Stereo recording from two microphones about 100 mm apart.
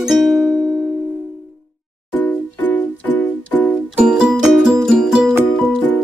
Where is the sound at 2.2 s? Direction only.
15° left (ahead or behind).